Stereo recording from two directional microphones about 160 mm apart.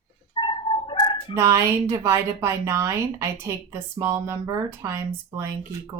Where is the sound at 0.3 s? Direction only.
30° left (ahead or behind).